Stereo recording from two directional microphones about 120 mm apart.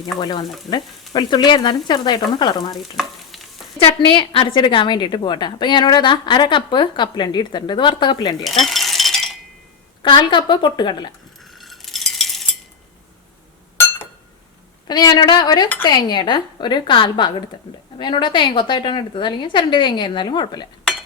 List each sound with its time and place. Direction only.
0.0 s a woman's voice: 35° left (ahead or behind)
3.8 s a woman's voice: 45° left (ahead or behind)
8.4 s chink: centre (ahead or behind)
10.0 s a woman's voice: 40° left (ahead or behind)
11.5 s a sound: centre (ahead or behind)
14.8 s a woman's voice: 35° left (ahead or behind)